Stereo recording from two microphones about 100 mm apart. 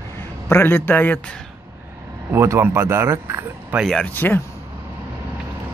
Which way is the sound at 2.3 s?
25° right (ahead or behind).